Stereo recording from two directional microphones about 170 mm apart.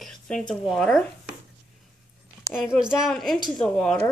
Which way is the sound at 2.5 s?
5° right (ahead or behind).